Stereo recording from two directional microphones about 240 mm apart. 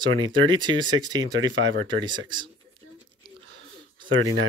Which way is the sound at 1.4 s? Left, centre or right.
Right.